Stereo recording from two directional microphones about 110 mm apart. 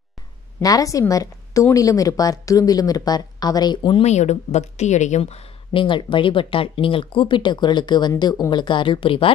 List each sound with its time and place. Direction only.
0.6 s speech: 30° left (ahead or behind)
4.0 s a woman's voice: 90° left
5.7 s speech: 50° left (ahead or behind)